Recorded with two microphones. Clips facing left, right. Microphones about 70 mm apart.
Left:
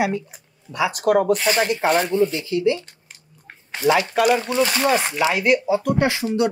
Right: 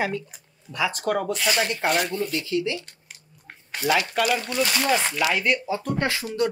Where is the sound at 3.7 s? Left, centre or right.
Left.